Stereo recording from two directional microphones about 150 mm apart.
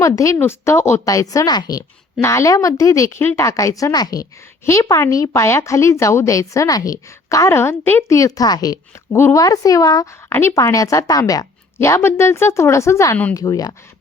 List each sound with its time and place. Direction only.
0.0 s speech: 20° left (ahead or behind)